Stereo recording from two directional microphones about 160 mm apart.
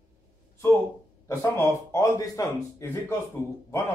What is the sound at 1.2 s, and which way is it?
Speech, 20° left (ahead or behind).